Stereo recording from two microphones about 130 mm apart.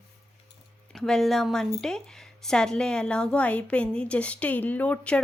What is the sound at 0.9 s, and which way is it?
A woman's voice, 5° left (ahead or behind).